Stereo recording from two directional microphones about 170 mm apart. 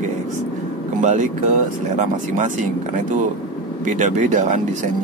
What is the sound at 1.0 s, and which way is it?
Speech, 45° right (ahead or behind).